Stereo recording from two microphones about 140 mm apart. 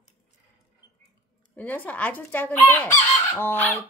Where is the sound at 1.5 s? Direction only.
10° left (ahead or behind).